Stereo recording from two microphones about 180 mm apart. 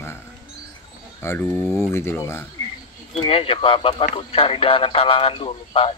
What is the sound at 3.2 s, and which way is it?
Speech, 30° left (ahead or behind).